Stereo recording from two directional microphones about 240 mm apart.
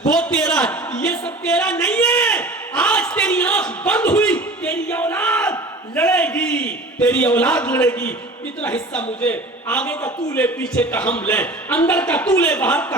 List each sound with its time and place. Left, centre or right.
0.0 s a man's voice: centre
1.5 s a sound: centre
8.6 s a man's voice: centre